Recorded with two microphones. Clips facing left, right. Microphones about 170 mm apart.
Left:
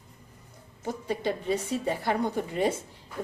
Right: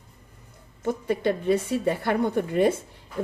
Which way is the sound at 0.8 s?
55° right (ahead or behind).